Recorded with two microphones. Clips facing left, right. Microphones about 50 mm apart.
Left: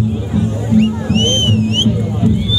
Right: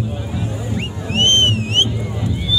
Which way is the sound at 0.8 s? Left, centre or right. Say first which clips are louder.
Left 5 dB; right.